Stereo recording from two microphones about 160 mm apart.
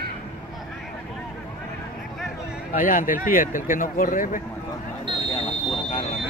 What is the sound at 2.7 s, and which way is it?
Speech, 55° left (ahead or behind).